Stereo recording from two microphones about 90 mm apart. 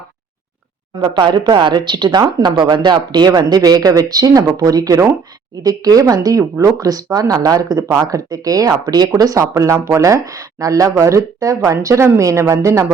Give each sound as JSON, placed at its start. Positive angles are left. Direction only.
{"t": 0.9, "sound": "speech", "side_deg": -55}